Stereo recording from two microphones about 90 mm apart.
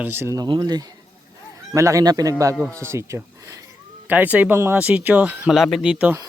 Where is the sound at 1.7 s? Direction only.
35° right (ahead or behind).